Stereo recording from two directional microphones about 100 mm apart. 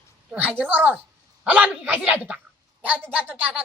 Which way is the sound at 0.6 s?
20° right (ahead or behind).